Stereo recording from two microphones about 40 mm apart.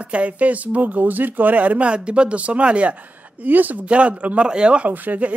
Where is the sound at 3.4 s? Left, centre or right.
Right.